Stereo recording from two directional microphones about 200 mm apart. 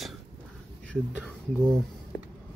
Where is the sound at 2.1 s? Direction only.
65° left (ahead or behind).